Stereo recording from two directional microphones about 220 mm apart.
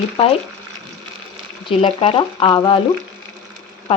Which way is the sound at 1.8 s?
25° left (ahead or behind).